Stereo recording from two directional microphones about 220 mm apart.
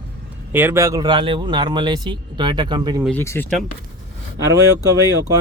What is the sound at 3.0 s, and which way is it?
Speech, 10° left (ahead or behind).